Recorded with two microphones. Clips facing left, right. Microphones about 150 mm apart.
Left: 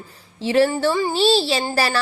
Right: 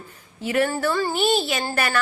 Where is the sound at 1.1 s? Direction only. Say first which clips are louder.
Left 4 dB; 30° left (ahead or behind).